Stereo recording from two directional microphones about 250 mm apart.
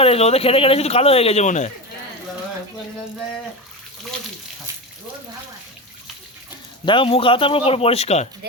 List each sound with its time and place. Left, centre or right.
0.0 s speech: left
6.8 s speech: centre